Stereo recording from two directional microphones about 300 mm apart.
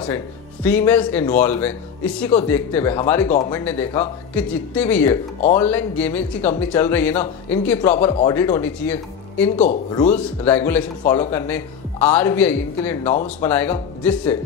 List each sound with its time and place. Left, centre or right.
0.7 s a man's voice: centre
7.9 s speech: centre
9.6 s speech: left
10.4 s a man's voice: centre